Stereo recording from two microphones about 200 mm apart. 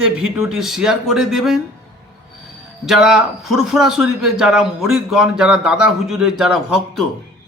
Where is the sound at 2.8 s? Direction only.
Centre (ahead or behind).